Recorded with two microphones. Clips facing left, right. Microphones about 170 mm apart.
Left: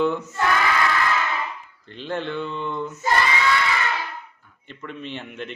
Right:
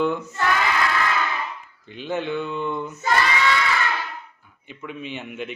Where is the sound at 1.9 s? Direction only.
5° right (ahead or behind).